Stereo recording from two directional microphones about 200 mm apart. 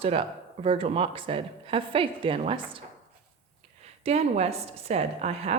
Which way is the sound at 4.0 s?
30° right (ahead or behind).